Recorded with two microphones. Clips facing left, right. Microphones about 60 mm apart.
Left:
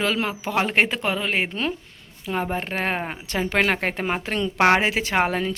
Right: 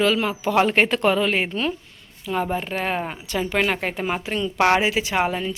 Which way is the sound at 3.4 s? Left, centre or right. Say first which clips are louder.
Left 1 dB; left.